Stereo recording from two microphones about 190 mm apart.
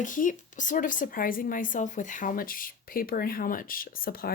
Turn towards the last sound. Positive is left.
turn(degrees=50)  # may be behind; listen again after turning